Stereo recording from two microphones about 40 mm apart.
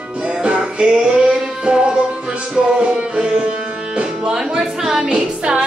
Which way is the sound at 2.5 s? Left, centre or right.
Right.